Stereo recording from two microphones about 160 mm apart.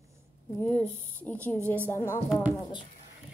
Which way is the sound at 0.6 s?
10° left (ahead or behind).